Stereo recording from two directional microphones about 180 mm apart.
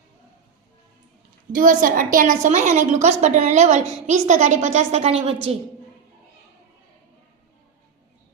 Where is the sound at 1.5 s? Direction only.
50° right (ahead or behind); by 5.4 s 35° right (ahead or behind).